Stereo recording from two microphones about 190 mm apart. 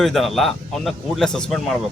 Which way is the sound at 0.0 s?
Centre (ahead or behind).